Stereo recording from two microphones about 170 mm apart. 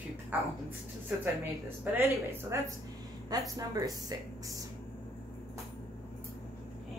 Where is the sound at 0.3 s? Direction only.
10° right (ahead or behind).